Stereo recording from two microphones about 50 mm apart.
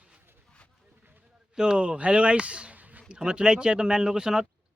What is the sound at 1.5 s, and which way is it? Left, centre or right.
Speech, centre.